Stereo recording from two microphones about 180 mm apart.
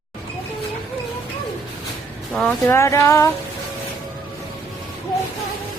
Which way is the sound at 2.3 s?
10° left (ahead or behind).